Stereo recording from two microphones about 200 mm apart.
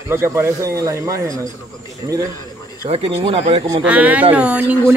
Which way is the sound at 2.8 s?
30° right (ahead or behind).